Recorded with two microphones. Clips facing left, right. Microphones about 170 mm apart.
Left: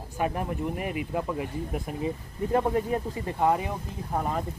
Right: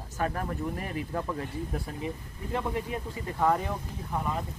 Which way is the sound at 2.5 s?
40° left (ahead or behind).